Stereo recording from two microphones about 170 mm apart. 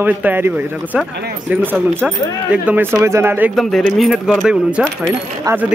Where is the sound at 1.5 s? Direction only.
10° right (ahead or behind).